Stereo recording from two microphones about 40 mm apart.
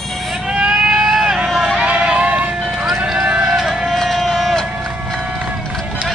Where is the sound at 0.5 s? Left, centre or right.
Right.